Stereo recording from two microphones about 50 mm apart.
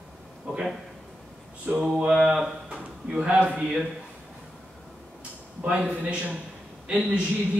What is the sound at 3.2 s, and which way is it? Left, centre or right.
Speech, right.